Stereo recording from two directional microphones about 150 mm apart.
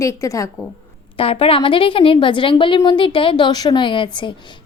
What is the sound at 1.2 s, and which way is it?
A woman's voice, 40° left (ahead or behind).